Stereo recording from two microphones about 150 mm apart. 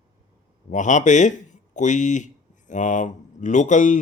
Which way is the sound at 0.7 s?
55° left (ahead or behind).